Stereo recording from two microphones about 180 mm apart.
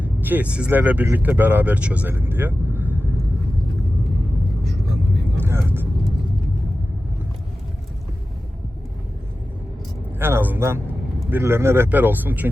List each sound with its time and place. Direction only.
0.0 s speech: 10° right (ahead or behind)
5.4 s vehicle: 15° right (ahead or behind)
10.2 s speech: 10° right (ahead or behind)